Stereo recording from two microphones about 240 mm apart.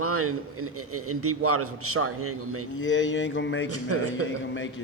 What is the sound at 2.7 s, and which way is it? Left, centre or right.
Speech, left.